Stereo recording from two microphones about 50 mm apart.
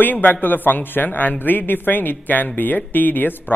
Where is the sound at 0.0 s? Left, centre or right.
Left.